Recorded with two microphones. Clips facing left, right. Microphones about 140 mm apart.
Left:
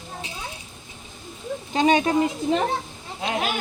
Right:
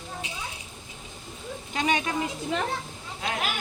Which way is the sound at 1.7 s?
30° left (ahead or behind).